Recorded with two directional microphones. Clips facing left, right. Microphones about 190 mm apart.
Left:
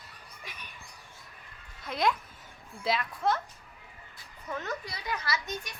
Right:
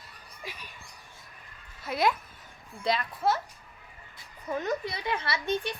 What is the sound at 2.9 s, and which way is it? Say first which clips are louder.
Speech: right 2 dB; 5° right (ahead or behind).